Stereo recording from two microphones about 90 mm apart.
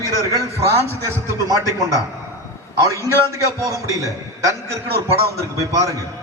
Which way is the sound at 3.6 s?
35° right (ahead or behind).